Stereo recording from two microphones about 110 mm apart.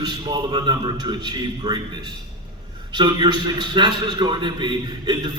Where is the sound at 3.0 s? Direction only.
40° right (ahead or behind).